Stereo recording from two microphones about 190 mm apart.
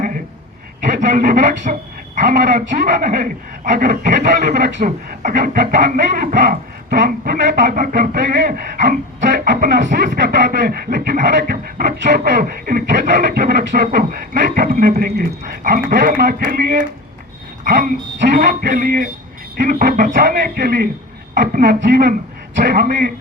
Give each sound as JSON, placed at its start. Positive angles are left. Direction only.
{"t": 0.9, "sound": "a man's voice", "side_deg": -45}